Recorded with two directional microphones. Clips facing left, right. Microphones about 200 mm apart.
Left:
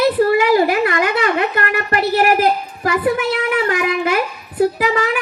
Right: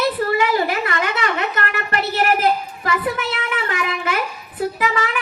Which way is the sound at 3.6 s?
45° left (ahead or behind).